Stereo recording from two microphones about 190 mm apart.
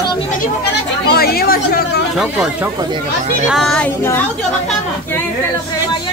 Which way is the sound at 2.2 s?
5° right (ahead or behind).